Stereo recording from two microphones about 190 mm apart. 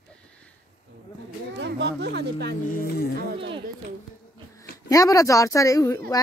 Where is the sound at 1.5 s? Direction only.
65° right (ahead or behind).